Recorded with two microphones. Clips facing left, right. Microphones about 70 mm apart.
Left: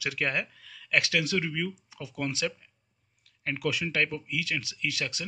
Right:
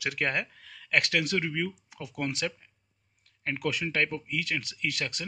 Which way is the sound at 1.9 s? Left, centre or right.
Right.